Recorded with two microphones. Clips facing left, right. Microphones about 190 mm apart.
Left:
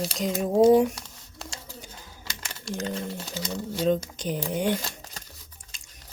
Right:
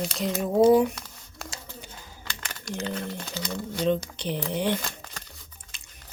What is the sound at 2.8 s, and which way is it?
Speech, 40° left (ahead or behind).